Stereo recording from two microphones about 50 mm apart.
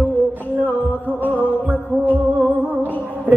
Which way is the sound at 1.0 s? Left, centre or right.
Right.